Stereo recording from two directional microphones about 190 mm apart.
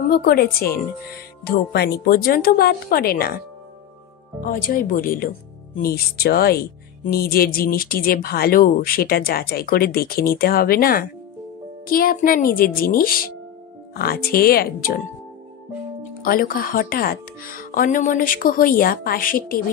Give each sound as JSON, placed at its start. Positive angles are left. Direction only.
{"t": 0.0, "sound": "speech", "side_deg": 50}
{"t": 4.4, "sound": "speech", "side_deg": 45}
{"t": 16.2, "sound": "speech", "side_deg": 50}